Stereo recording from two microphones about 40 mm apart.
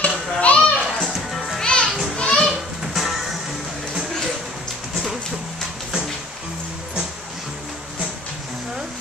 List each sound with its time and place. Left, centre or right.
0.0 s children playing: left
1.1 s music: centre
1.6 s children playing: left
2.8 s music: centre